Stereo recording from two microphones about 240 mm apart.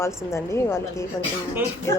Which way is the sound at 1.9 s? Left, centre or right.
Centre.